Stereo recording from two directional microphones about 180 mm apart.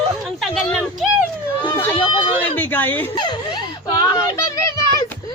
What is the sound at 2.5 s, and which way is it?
Speech, 10° left (ahead or behind).